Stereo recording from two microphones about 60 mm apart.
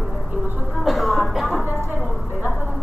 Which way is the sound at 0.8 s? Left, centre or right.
Centre.